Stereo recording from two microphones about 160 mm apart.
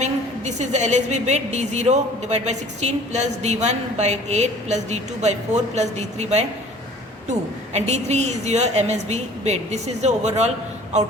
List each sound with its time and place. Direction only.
0.0 s a woman's voice: 45° right (ahead or behind)